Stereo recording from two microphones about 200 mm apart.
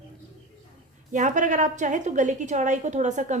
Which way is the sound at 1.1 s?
40° right (ahead or behind).